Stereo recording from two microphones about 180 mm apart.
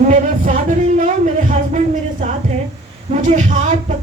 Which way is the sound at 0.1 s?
45° right (ahead or behind).